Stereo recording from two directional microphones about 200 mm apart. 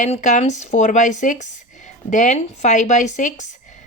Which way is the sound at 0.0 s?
35° left (ahead or behind).